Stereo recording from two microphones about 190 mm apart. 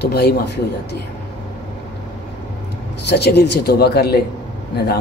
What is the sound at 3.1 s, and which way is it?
A man's voice, 60° left (ahead or behind).